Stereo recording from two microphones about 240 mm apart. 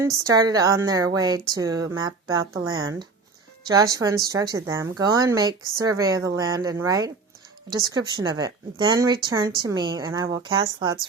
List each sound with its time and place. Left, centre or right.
0.0 s speech: centre